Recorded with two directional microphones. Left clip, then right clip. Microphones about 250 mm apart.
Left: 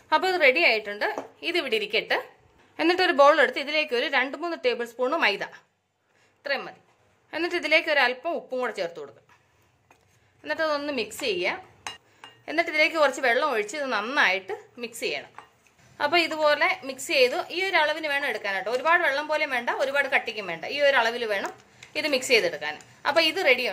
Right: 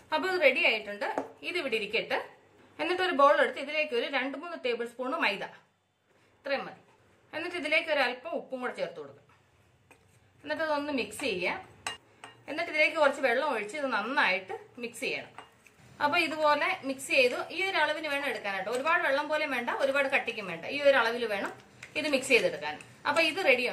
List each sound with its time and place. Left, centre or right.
0.1 s a woman's voice: left
7.2 s a woman's voice: left
10.4 s a woman's voice: left